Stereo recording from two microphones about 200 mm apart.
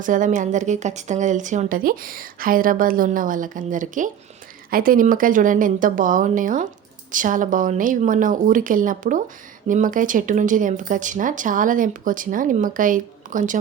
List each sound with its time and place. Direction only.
0.0 s speech: 40° right (ahead or behind)